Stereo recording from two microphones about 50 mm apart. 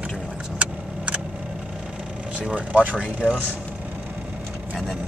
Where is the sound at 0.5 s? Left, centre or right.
Right.